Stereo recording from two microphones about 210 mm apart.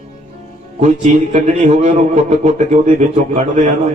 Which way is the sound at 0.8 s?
30° right (ahead or behind).